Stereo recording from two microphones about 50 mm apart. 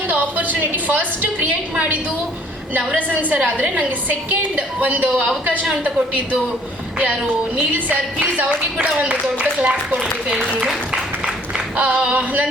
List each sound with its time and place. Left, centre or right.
0.1 s a woman's voice: right
2.7 s a woman's voice: right
7.0 s a woman's voice: right
10.6 s speech: centre
11.8 s a woman's voice: right
12.1 s a woman's voice: right